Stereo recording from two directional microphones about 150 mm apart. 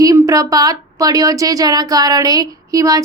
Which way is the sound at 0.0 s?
25° right (ahead or behind).